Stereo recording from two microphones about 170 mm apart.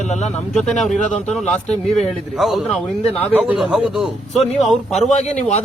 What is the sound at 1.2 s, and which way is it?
Speech, 5° left (ahead or behind).